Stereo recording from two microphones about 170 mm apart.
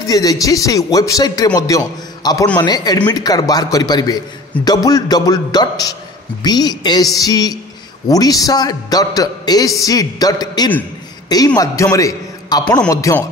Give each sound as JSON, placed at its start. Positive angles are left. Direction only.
{"t": 0.0, "sound": "a man's voice", "side_deg": 20}